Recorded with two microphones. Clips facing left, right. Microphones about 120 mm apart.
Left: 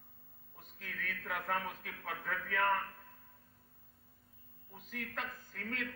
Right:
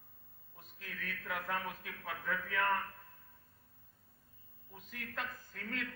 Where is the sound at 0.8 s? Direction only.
45° left (ahead or behind).